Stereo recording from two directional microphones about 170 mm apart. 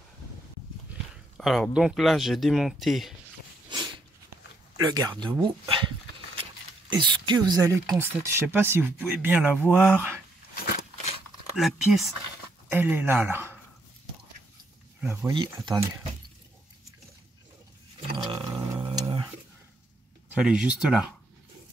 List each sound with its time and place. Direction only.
1.4 s speech: centre (ahead or behind)
3.7 s a sound: 25° right (ahead or behind)
4.7 s speech: 20° right (ahead or behind)
6.9 s speech: 25° right (ahead or behind); by 10.2 s 10° right (ahead or behind)
11.5 s speech: centre (ahead or behind)
12.7 s speech: 10° right (ahead or behind)
15.0 s speech: 10° right (ahead or behind)
15.3 s speech: 25° right (ahead or behind)
18.1 s a sound: 25° right (ahead or behind)
18.8 s dog: 30° right (ahead or behind)
20.2 s speech: 5° right (ahead or behind)